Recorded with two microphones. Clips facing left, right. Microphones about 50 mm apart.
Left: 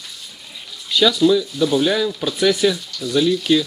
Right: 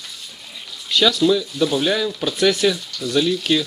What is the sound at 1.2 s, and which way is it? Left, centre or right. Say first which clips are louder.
Speech: left 2 dB; centre.